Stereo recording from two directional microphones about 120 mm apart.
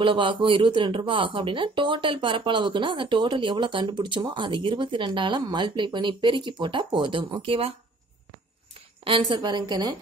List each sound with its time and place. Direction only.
0.0 s speech: 45° right (ahead or behind)
9.0 s a woman's voice: 45° right (ahead or behind)